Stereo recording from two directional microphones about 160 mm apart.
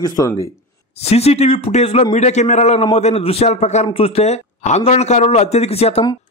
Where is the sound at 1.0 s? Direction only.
40° left (ahead or behind).